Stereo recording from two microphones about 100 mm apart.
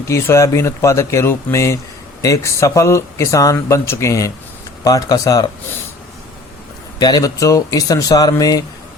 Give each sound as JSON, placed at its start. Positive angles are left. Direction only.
{"t": 0.1, "sound": "speech", "side_deg": 25}
{"t": 7.0, "sound": "speech", "side_deg": 40}